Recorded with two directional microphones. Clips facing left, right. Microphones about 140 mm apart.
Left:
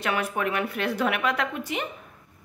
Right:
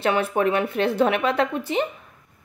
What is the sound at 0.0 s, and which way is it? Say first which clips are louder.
A woman's voice: right 6 dB; 30° right (ahead or behind).